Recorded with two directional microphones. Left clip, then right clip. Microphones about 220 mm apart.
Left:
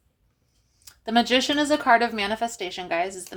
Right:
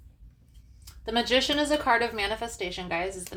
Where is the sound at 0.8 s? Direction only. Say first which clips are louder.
Left 5 dB; 45° left (ahead or behind).